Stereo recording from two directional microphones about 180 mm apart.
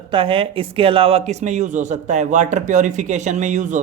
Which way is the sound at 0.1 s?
30° right (ahead or behind).